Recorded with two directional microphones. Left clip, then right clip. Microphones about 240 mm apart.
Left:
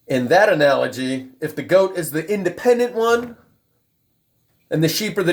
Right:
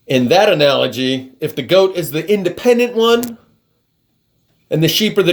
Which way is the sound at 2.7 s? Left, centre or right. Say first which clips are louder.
Right 4 dB; right.